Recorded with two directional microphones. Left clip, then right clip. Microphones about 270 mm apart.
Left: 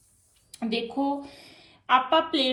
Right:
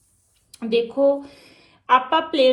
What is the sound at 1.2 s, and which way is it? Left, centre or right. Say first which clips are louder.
Speech: right 2 dB; centre.